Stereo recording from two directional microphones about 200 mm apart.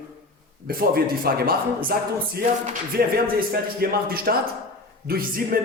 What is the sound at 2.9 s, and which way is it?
Speech, 45° right (ahead or behind).